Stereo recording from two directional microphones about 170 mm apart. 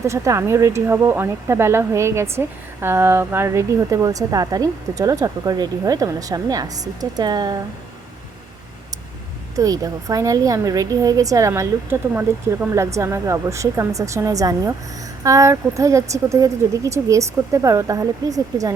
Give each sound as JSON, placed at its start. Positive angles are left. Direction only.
{"t": 0.0, "sound": "speech", "side_deg": -15}
{"t": 9.6, "sound": "a woman's voice", "side_deg": -20}